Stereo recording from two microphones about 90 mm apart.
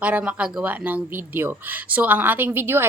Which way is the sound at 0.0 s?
15° right (ahead or behind).